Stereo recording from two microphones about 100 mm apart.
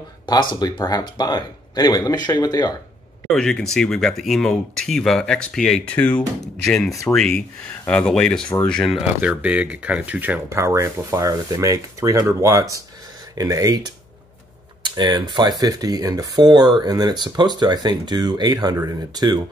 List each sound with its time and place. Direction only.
0.3 s speech: 45° left (ahead or behind)
3.3 s speech: 5° left (ahead or behind)
5.9 s speech: 15° left (ahead or behind)
8.9 s speech: 10° right (ahead or behind)
10.5 s speech: 30° right (ahead or behind)